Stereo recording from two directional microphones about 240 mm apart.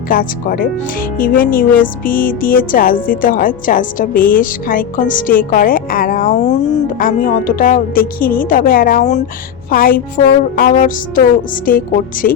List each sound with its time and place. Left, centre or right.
0.1 s speech: left